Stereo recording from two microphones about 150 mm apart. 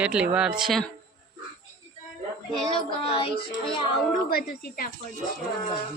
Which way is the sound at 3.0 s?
40° left (ahead or behind).